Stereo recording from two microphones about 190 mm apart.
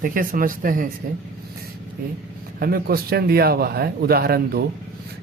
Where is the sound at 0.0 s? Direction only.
45° right (ahead or behind).